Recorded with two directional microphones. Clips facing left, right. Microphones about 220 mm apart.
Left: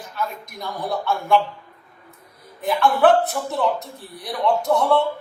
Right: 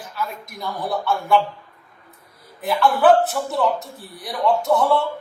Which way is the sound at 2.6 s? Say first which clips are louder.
Right 1 dB; centre (ahead or behind).